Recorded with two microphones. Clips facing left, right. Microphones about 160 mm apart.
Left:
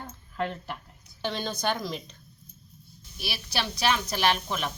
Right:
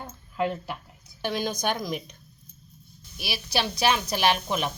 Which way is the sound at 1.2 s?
10° right (ahead or behind).